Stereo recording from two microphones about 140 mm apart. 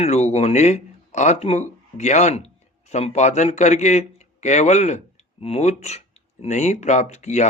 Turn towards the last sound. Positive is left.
turn(degrees=55)  # may be behind; listen again after turning